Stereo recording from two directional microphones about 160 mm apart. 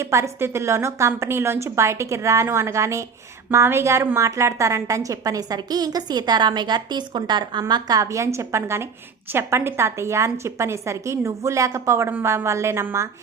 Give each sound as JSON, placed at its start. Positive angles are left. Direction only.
{"t": 0.0, "sound": "a woman's voice", "side_deg": -20}